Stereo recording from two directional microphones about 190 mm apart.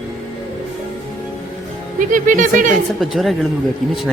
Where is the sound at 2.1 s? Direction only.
45° right (ahead or behind).